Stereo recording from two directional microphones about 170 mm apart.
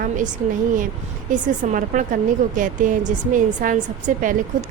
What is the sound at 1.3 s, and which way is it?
A woman's voice, 50° right (ahead or behind).